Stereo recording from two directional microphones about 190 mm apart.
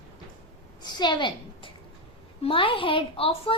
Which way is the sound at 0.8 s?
20° left (ahead or behind).